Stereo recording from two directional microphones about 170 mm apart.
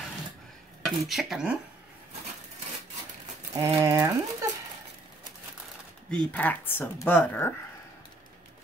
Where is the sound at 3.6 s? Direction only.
20° right (ahead or behind).